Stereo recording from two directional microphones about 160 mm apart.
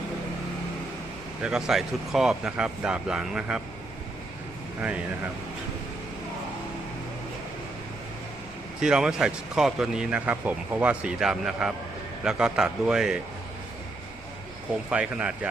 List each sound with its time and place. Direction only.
1.4 s a man's voice: 5° right (ahead or behind)
4.8 s speech: 5° right (ahead or behind)
8.8 s a man's voice: 5° right (ahead or behind)
14.8 s speech: 5° right (ahead or behind)